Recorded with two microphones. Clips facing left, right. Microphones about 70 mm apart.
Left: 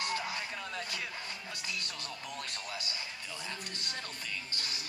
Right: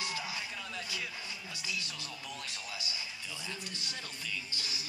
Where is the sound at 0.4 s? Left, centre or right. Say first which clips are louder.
Left 2 dB; left.